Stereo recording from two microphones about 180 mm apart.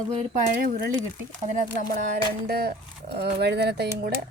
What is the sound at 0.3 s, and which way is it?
Speech, 45° right (ahead or behind).